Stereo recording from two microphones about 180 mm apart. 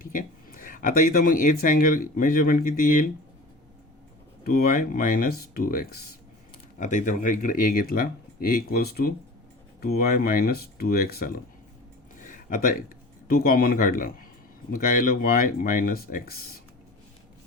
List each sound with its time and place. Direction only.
0.0 s speech: 50° left (ahead or behind)
4.4 s speech: 55° left (ahead or behind)
6.7 s speech: 45° left (ahead or behind)
12.1 s a sound: 45° left (ahead or behind)
13.2 s speech: 55° left (ahead or behind)